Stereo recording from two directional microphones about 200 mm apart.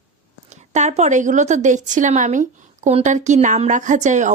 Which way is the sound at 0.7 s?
35° right (ahead or behind).